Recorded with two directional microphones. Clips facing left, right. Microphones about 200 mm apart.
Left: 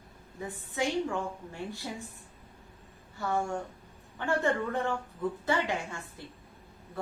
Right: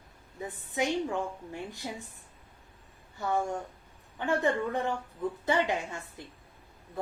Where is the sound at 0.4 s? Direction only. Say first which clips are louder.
Right 1 dB; 20° right (ahead or behind).